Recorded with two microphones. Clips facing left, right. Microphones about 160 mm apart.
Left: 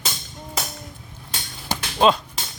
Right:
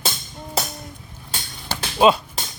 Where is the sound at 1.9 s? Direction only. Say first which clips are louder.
Right 2 dB; 10° right (ahead or behind).